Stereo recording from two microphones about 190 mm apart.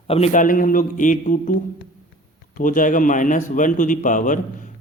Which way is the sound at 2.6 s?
45° left (ahead or behind).